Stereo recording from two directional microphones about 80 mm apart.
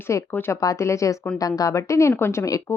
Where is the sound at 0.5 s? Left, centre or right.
Left.